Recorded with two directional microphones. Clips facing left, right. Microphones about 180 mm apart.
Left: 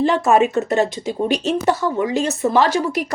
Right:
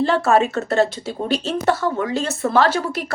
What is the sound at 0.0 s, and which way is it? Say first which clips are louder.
Speech: left 1 dB; 15° left (ahead or behind).